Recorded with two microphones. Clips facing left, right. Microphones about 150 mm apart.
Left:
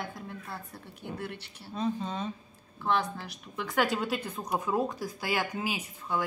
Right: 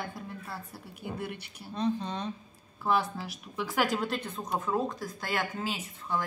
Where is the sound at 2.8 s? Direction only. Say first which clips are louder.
Right 1 dB; 5° right (ahead or behind); by 5.8 s 10° left (ahead or behind).